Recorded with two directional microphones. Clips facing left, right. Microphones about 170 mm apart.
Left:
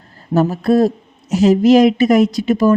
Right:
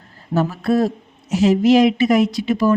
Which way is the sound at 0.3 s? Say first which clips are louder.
Left 4 dB; 40° left (ahead or behind).